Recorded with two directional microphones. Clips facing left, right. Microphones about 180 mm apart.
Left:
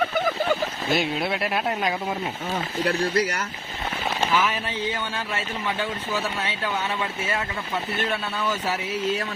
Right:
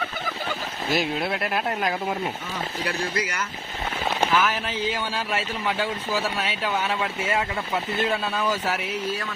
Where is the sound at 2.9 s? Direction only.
40° left (ahead or behind).